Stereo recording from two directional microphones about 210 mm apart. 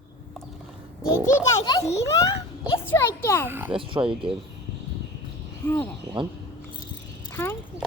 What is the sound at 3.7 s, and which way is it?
Speech, 25° right (ahead or behind).